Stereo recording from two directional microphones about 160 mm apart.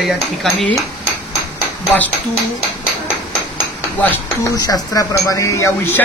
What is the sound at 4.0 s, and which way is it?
Speech, 20° left (ahead or behind).